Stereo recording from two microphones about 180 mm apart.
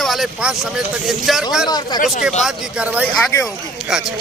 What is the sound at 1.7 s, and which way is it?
Speech, 20° left (ahead or behind).